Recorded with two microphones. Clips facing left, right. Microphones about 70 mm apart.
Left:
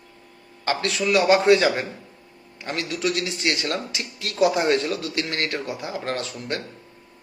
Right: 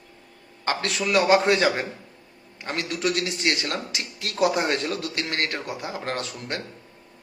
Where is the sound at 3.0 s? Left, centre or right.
Right.